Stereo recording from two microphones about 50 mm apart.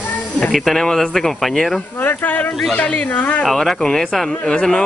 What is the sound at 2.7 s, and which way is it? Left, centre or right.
Speech, left.